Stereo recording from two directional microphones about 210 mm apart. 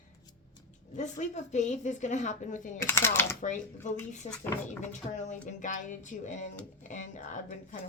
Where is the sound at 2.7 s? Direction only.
10° left (ahead or behind).